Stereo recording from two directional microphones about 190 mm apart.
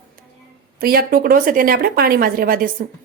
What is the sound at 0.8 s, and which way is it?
A woman's voice, 50° right (ahead or behind).